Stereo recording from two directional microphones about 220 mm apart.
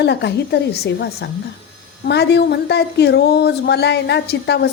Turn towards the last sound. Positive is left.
turn(degrees=50)  # may be behind; listen again after turning